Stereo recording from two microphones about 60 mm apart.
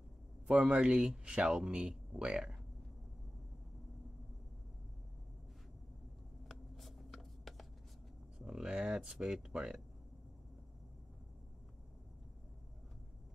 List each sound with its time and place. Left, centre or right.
0.7 s speech: centre
6.5 s writing: centre
8.4 s a sound: centre
8.6 s speech: centre